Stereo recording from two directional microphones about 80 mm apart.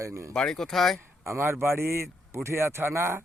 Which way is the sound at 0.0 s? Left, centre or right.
Right.